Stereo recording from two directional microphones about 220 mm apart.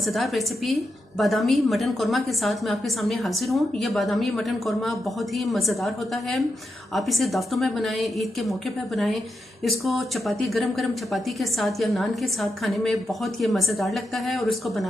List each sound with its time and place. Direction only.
0.0 s speech: centre (ahead or behind)
6.9 s speech: centre (ahead or behind)
9.6 s speech: centre (ahead or behind)